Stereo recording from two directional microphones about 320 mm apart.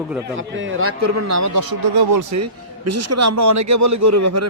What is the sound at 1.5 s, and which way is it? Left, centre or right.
Speech, right.